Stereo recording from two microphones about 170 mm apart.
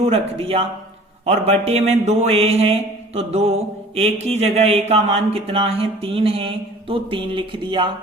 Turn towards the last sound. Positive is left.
turn(degrees=-30)  # may be behind; listen again after turning